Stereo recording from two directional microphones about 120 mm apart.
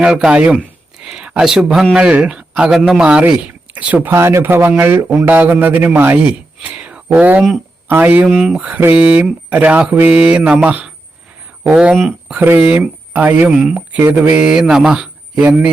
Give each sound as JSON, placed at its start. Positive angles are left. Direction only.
{"t": 0.0, "sound": "a man's voice", "side_deg": -5}
{"t": 11.9, "sound": "speech", "side_deg": 0}
{"t": 12.4, "sound": "speech", "side_deg": -15}